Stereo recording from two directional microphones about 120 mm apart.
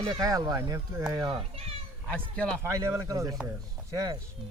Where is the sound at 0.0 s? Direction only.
30° right (ahead or behind).